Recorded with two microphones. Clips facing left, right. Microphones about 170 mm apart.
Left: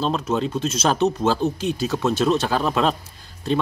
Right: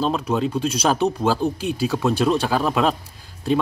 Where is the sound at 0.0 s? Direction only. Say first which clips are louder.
Right 1 dB; 5° right (ahead or behind).